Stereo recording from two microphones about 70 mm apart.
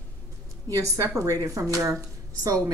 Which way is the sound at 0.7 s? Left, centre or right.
Right.